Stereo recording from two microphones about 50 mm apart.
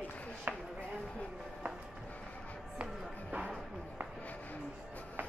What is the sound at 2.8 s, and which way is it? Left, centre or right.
Music, centre.